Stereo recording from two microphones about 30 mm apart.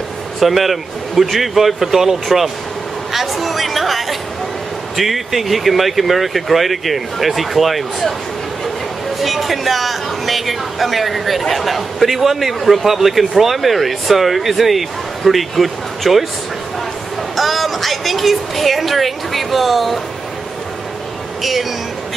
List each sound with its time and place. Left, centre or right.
0.4 s a man's voice: centre
9.2 s a man's voice: centre
17.4 s a man's voice: centre
21.4 s a man's voice: centre